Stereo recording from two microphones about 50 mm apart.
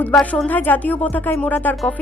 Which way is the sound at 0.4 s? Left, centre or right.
Left.